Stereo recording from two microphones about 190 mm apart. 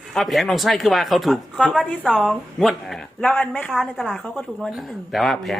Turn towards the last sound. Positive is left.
turn(degrees=0)  # may be behind; listen again after turning